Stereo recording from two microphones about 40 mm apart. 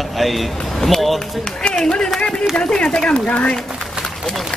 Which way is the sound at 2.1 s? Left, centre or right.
Left.